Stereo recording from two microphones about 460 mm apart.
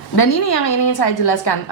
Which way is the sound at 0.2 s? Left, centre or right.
Left.